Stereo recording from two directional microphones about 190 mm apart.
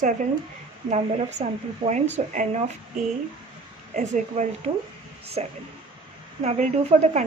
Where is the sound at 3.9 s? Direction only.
40° right (ahead or behind).